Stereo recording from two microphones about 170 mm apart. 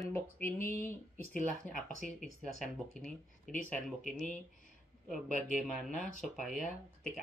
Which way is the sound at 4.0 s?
45° left (ahead or behind).